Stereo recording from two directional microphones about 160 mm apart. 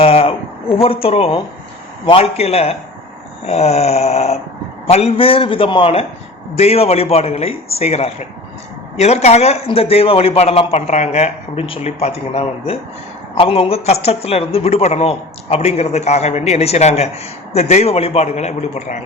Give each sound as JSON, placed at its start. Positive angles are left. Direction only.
{"t": 0.0, "sound": "a man's voice", "side_deg": 35}